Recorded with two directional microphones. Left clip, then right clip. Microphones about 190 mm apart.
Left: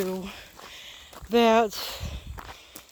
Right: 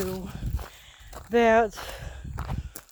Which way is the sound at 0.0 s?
45° left (ahead or behind).